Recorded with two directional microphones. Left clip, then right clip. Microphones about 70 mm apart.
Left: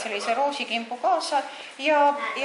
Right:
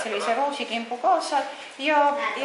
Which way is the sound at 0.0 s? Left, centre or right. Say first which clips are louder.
Even; left.